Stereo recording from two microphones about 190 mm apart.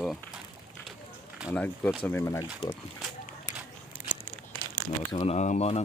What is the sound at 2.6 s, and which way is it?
Speech, 30° left (ahead or behind).